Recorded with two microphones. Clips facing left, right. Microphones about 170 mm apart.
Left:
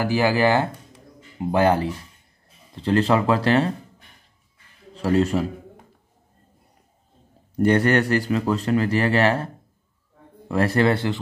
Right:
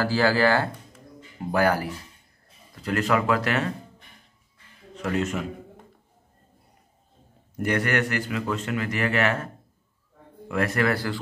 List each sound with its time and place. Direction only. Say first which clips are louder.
0.0 s speech: left 2 dB; 15° left (ahead or behind)
4.9 s a man's voice: left 7 dB; 35° left (ahead or behind)
7.5 s a man's voice: left 7 dB; 30° left (ahead or behind)
10.5 s speech: left 5 dB; 30° left (ahead or behind)